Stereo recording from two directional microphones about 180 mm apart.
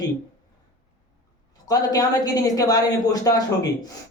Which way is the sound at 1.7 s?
20° left (ahead or behind).